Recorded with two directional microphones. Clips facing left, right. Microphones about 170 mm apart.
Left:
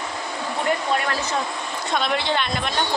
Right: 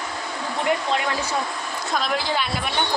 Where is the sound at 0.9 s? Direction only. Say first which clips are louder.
Left 1 dB; 20° right (ahead or behind).